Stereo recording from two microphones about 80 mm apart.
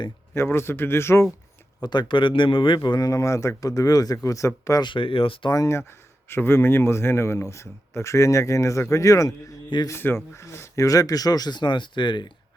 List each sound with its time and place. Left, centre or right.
0.3 s speech: left
1.8 s speech: left
3.1 s speech: left
4.8 s speech: left
5.5 s speech: left
10.0 s speech: left